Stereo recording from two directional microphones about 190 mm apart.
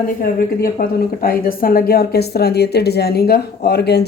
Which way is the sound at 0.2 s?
50° left (ahead or behind).